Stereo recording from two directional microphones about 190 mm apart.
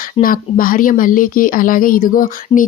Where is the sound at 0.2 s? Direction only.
50° left (ahead or behind).